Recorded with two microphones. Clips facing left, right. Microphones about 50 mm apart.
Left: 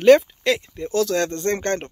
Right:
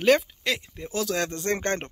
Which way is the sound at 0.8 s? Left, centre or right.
Centre.